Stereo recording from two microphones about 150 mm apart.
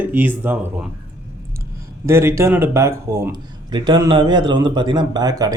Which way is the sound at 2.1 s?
15° right (ahead or behind).